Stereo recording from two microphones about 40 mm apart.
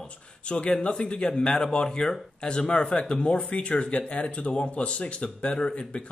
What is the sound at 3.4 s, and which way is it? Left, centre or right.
Speech, left.